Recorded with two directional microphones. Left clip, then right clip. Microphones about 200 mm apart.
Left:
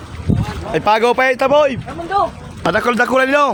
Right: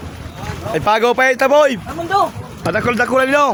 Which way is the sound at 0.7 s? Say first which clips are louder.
Left 1 dB; 5° left (ahead or behind).